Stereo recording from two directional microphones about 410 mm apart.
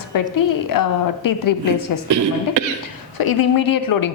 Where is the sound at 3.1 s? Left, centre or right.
Left.